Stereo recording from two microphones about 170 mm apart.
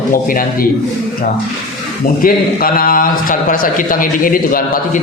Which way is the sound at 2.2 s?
60° left (ahead or behind).